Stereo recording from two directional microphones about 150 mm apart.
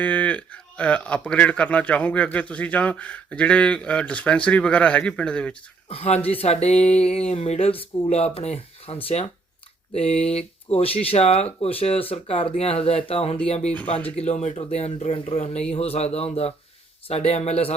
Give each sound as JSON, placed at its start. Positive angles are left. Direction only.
{"t": 0.0, "sound": "speech", "side_deg": 10}
{"t": 5.9, "sound": "speech", "side_deg": 45}